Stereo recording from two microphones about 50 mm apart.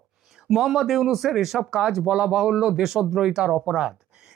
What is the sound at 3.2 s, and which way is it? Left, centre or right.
Speech, centre.